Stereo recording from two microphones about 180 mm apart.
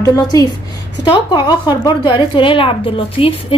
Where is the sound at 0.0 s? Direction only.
20° left (ahead or behind).